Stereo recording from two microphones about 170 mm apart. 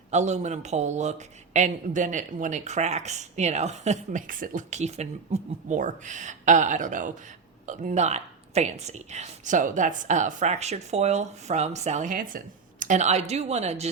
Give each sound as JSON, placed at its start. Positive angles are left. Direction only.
{"t": 0.1, "sound": "speech", "side_deg": -45}